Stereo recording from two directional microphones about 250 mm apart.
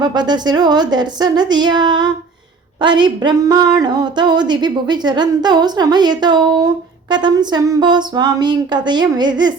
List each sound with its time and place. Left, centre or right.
0.0 s speech: centre